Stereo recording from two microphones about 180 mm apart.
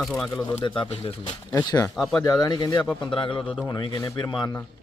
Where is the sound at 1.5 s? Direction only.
20° left (ahead or behind).